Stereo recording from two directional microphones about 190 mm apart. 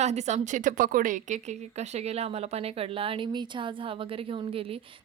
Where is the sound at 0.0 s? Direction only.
35° right (ahead or behind).